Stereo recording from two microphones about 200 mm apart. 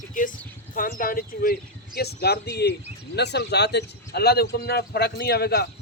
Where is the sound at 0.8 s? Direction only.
45° left (ahead or behind).